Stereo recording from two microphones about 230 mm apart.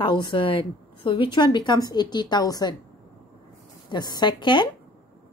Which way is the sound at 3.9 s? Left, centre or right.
Centre.